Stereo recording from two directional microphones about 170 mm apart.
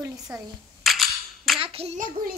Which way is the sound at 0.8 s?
Centre (ahead or behind).